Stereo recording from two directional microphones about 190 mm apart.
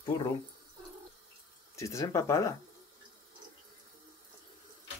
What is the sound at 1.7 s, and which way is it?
Speech, 15° left (ahead or behind).